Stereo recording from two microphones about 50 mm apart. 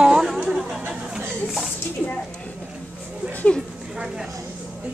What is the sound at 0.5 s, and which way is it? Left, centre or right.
Chatter, centre.